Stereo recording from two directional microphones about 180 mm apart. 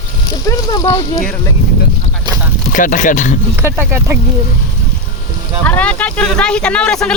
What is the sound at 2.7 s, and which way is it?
Speech, 45° left (ahead or behind).